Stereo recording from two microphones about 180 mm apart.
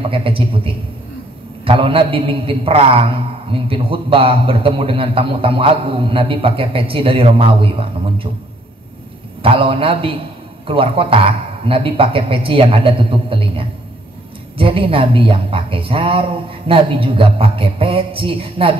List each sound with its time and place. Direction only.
0.1 s a man's voice: 30° right (ahead or behind)
1.6 s a man's voice: 30° right (ahead or behind)
9.4 s a man's voice: 30° right (ahead or behind)